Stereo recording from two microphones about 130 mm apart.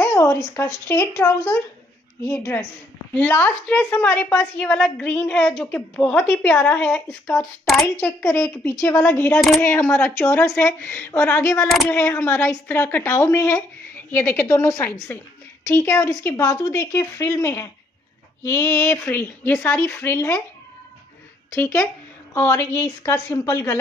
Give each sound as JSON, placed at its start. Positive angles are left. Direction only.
{"t": 0.0, "sound": "a woman's voice", "side_deg": 20}
{"t": 21.5, "sound": "speech", "side_deg": 20}